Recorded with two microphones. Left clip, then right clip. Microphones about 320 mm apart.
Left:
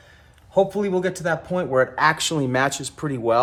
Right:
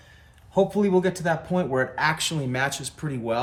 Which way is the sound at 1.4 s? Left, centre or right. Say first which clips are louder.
Left 4 dB; centre.